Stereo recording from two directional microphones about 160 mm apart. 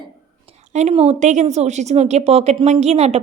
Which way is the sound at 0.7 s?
40° right (ahead or behind).